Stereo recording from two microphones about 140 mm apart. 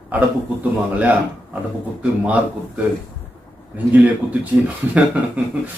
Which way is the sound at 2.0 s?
10° right (ahead or behind).